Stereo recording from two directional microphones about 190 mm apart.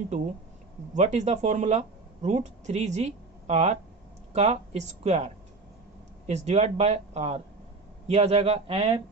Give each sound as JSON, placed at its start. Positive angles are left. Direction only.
{"t": 0.9, "sound": "speech", "side_deg": -40}